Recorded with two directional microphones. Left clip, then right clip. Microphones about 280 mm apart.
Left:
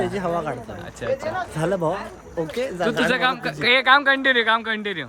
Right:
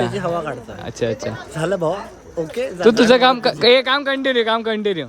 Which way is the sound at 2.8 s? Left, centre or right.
Right.